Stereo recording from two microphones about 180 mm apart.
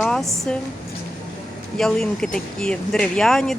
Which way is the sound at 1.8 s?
Centre (ahead or behind).